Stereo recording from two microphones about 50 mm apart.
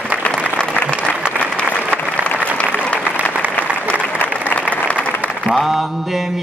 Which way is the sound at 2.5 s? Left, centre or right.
Left.